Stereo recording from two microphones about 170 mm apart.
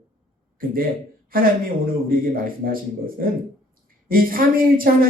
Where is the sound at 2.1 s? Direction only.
55° right (ahead or behind).